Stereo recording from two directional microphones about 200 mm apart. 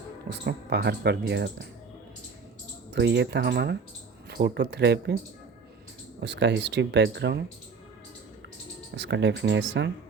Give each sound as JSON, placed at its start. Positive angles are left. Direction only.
{"t": 0.3, "sound": "speech", "side_deg": -55}
{"t": 2.9, "sound": "speech", "side_deg": -60}
{"t": 6.1, "sound": "speech", "side_deg": -60}
{"t": 9.0, "sound": "speech", "side_deg": -60}